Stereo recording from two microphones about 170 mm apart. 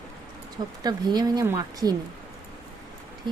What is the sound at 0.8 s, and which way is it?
Speech, 25° right (ahead or behind).